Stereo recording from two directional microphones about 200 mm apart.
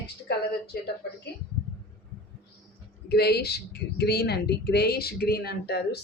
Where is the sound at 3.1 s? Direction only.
55° left (ahead or behind).